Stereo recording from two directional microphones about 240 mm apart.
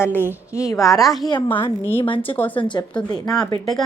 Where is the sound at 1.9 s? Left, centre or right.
Left.